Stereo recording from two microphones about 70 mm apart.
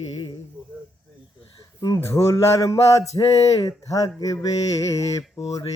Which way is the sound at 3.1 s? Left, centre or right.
Left.